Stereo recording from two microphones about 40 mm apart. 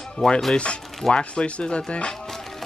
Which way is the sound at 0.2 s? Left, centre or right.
Left.